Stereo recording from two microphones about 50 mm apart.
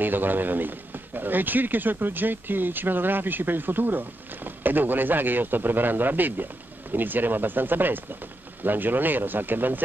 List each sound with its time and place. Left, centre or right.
0.0 s a man's voice: right